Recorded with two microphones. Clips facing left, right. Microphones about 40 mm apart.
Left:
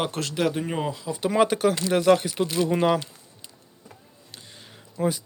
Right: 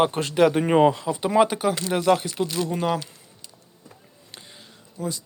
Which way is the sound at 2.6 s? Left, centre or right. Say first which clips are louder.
Left 4 dB; left.